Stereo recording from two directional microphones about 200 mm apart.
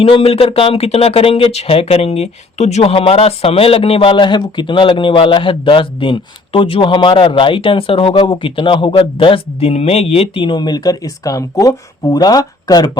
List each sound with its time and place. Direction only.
0.0 s speech: 30° left (ahead or behind)